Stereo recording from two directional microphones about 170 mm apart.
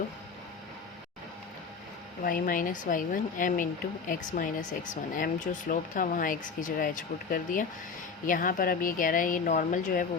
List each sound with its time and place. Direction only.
2.2 s speech: 55° left (ahead or behind)